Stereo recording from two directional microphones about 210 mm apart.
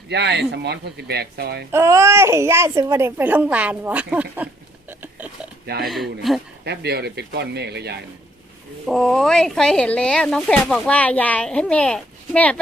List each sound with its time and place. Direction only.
0.1 s speech: 55° right (ahead or behind)
1.7 s speech: 15° right (ahead or behind)
4.9 s a sound: 5° right (ahead or behind)
5.8 s speech: centre (ahead or behind)
6.7 s speech: 50° right (ahead or behind)
8.9 s speech: centre (ahead or behind)